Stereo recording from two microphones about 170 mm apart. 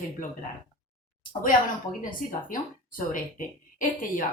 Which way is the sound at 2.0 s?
55° left (ahead or behind).